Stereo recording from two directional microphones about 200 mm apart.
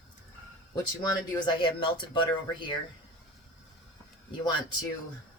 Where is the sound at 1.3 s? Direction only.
25° left (ahead or behind).